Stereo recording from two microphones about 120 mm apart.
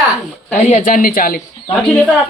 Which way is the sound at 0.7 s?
90° left.